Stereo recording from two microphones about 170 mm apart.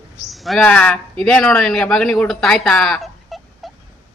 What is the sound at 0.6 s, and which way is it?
Speech, 10° left (ahead or behind).